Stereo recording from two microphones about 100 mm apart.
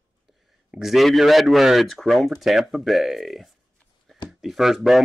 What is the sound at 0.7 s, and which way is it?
Speech, centre (ahead or behind).